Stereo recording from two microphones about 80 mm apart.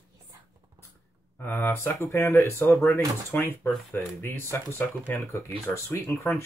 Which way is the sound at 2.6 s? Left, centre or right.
Left.